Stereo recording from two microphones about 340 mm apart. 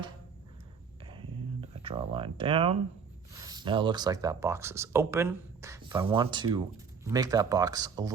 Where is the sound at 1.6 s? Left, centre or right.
Centre.